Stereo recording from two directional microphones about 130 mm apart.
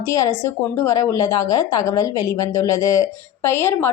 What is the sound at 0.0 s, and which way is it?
A woman's voice, 20° left (ahead or behind).